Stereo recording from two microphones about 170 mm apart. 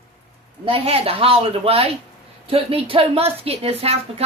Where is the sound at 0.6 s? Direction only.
35° right (ahead or behind).